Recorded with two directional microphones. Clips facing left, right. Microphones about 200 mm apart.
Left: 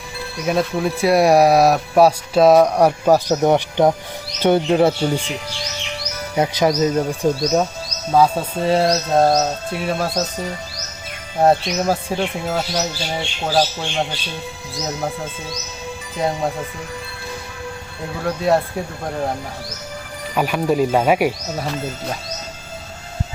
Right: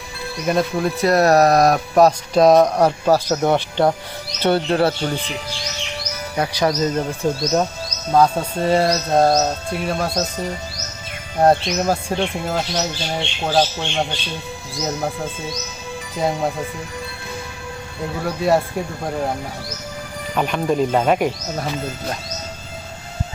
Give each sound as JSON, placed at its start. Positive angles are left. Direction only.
{"t": 0.3, "sound": "speech", "side_deg": 0}
{"t": 6.3, "sound": "speech", "side_deg": 20}
{"t": 11.3, "sound": "speech", "side_deg": 0}
{"t": 16.1, "sound": "speech", "side_deg": 0}
{"t": 18.2, "sound": "speech", "side_deg": 0}
{"t": 20.3, "sound": "speech", "side_deg": 5}